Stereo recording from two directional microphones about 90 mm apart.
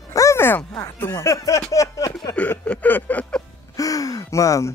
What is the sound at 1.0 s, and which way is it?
Speech, 25° left (ahead or behind).